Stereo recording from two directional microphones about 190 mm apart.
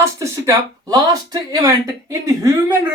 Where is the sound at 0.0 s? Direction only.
15° right (ahead or behind).